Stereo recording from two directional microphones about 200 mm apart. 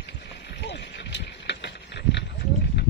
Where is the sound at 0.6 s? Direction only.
60° left (ahead or behind).